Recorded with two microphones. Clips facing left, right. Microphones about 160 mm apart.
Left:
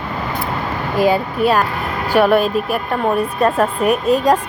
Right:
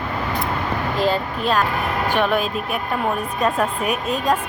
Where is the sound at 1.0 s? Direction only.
10° left (ahead or behind).